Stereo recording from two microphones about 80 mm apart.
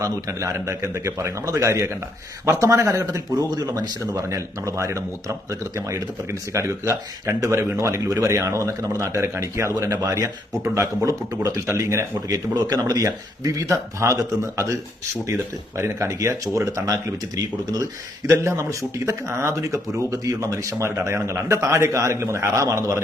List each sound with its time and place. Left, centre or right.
0.0 s speech: right
4.1 s speech: right
12.5 s speech: right
13.7 s speech: right
15.8 s speech: right
18.3 s speech: right